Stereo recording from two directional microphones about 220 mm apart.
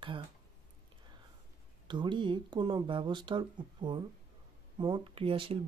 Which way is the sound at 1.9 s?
20° right (ahead or behind).